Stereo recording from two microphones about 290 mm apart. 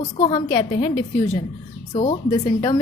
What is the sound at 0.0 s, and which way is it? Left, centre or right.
Speech, centre.